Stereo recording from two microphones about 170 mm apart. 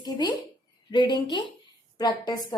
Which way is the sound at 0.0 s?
25° left (ahead or behind).